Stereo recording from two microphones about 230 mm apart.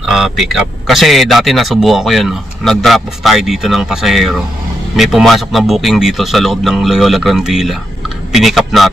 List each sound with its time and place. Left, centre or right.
0.0 s a man's voice: centre